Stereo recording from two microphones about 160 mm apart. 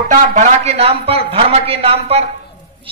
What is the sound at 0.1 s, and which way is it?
A woman's voice, 45° right (ahead or behind).